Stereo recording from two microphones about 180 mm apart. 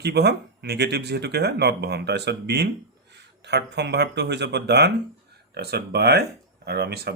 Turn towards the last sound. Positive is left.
turn(degrees=-60)  # may be behind; listen again after turning